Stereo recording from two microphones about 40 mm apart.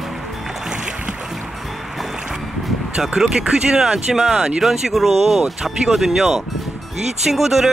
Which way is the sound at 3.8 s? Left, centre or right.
Centre.